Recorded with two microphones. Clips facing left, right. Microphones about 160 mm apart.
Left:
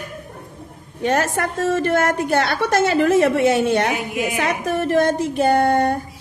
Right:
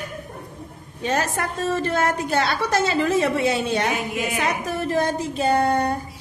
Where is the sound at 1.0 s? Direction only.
60° left (ahead or behind).